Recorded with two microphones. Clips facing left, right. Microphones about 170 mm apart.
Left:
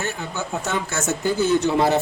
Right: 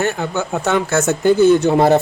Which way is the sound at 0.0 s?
70° right (ahead or behind).